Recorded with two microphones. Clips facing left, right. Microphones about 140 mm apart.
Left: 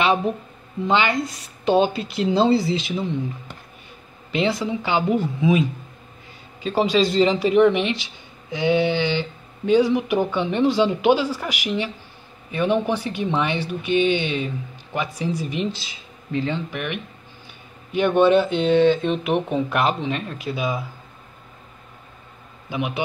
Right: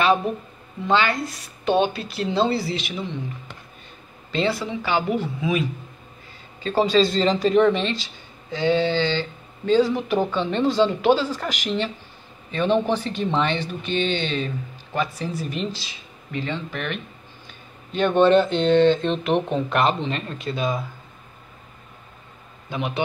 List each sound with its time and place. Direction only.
0.8 s speech: 20° left (ahead or behind)
4.3 s speech: 15° left (ahead or behind)
22.7 s speech: 10° left (ahead or behind)